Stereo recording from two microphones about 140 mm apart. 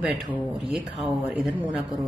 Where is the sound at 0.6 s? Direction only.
Centre (ahead or behind).